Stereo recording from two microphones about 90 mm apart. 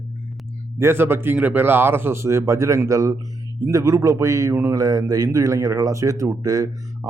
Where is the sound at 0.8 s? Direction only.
25° right (ahead or behind).